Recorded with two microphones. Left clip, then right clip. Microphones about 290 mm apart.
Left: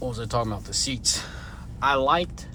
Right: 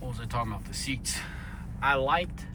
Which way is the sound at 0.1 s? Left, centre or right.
Centre.